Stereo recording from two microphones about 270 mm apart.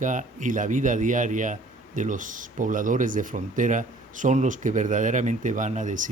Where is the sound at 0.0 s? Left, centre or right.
Right.